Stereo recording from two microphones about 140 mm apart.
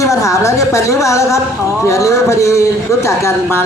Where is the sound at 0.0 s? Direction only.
20° left (ahead or behind).